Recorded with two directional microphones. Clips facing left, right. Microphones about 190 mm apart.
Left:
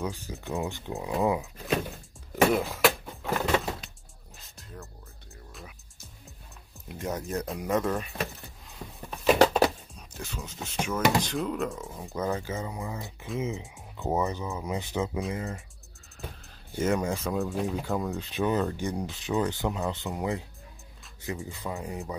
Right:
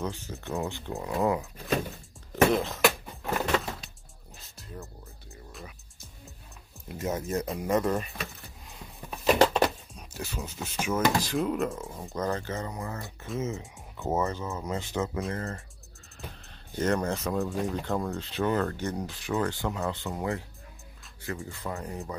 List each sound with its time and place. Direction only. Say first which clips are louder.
0.0 s speech: even; 10° left (ahead or behind)
2.5 s a sound: even; 10° left (ahead or behind)
5.5 s music: right 2 dB; centre (ahead or behind)
6.9 s speech: right 2 dB; centre (ahead or behind)
9.2 s a sound: left 1 dB; 5° left (ahead or behind)
9.9 s speech: right 2 dB; 5° right (ahead or behind); by 15.0 s 15° left (ahead or behind)
16.2 s speech: left 2 dB; 5° left (ahead or behind)
18.1 s speech: left 1 dB; 15° left (ahead or behind)